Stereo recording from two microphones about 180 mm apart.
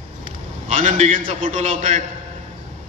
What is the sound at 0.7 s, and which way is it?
A man's voice, 45° right (ahead or behind).